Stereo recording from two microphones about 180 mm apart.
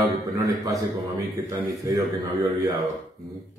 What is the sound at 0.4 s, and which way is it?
Speech, 20° right (ahead or behind).